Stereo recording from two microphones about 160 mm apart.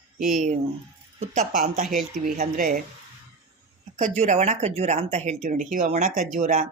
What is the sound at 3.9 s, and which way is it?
Speech, 50° right (ahead or behind).